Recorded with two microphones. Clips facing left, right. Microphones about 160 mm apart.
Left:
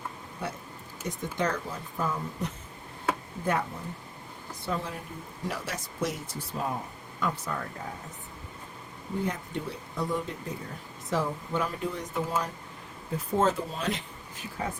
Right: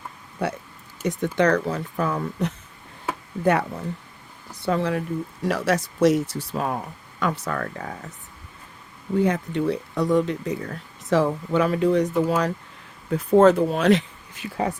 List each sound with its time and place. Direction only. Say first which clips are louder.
0.4 s speech: right 9 dB; 80° right
9.2 s speech: right 12 dB; 80° right